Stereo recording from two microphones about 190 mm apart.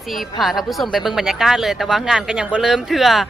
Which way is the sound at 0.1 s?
Centre (ahead or behind).